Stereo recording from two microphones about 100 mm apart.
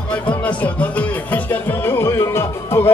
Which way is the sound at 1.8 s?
25° left (ahead or behind).